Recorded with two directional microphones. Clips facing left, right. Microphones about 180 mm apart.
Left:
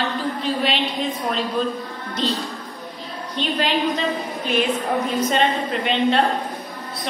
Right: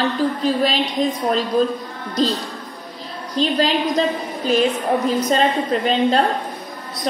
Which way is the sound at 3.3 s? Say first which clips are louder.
Right 5 dB; 35° right (ahead or behind).